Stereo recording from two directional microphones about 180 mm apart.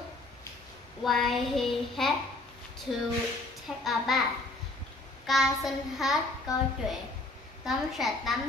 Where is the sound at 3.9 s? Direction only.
Centre (ahead or behind).